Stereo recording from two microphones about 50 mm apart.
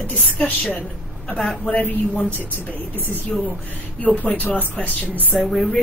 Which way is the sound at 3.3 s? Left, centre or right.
Centre.